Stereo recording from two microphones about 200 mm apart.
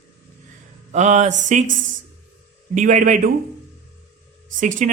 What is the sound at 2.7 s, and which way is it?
Speech, 40° right (ahead or behind).